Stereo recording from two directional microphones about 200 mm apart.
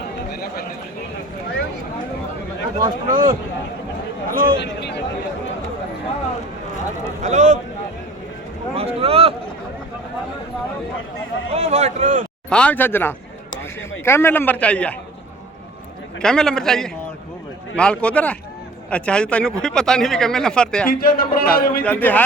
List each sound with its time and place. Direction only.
0.3 s a sound: 50° left (ahead or behind)
3.1 s speech: 45° right (ahead or behind)
4.5 s speech: 60° left (ahead or behind)
7.2 s speech: 35° right (ahead or behind)
8.7 s speech: 30° right (ahead or behind)
11.5 s speech: 30° right (ahead or behind)
12.5 s a man's voice: 5° left (ahead or behind)
16.2 s a man's voice: centre (ahead or behind)
20.8 s a man's voice: 45° left (ahead or behind)
21.8 s a man's voice: 10° left (ahead or behind)